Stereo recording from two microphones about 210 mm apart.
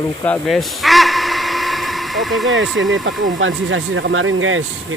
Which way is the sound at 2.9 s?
70° right (ahead or behind).